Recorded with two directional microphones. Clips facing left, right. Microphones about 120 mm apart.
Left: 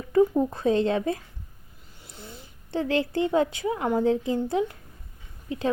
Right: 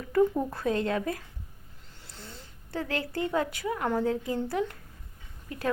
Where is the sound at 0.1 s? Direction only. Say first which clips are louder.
Left 4 dB; 20° left (ahead or behind).